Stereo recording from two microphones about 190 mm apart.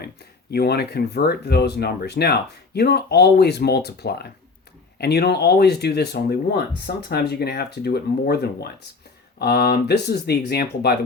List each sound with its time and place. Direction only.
0.5 s speech: 55° left (ahead or behind)